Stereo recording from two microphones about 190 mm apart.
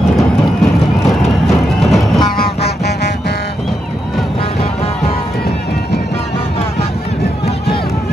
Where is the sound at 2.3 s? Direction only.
55° left (ahead or behind).